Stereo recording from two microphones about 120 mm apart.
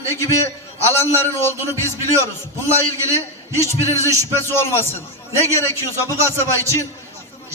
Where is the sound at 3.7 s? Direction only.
25° right (ahead or behind).